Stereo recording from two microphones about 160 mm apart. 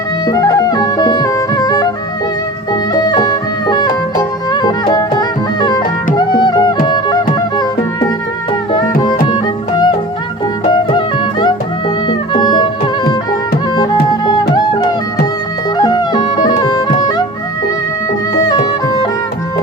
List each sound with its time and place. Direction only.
0.3 s music: 25° left (ahead or behind)
2.9 s music: 25° left (ahead or behind)
9.2 s music: 30° left (ahead or behind)
15.8 s music: 25° left (ahead or behind)
18.4 s music: 25° left (ahead or behind)